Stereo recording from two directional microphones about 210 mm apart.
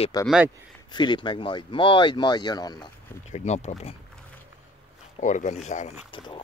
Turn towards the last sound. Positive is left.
turn(degrees=35)  # may be behind; listen again after turning